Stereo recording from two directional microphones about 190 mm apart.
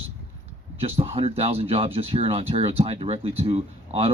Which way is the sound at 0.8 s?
30° right (ahead or behind).